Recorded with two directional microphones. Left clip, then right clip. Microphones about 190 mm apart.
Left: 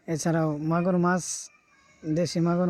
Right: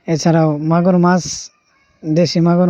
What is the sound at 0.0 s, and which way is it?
Speech, 30° right (ahead or behind).